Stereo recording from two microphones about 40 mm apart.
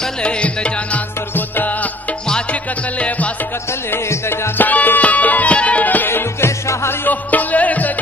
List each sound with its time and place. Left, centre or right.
0.2 s music: left
1.3 s music: left
4.6 s music: left
6.0 s music: left
7.1 s music: left